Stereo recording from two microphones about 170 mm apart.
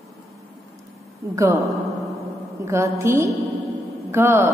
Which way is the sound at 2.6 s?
15° right (ahead or behind).